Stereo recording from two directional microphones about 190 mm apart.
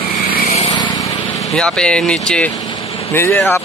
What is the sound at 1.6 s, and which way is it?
A man's voice, 5° left (ahead or behind).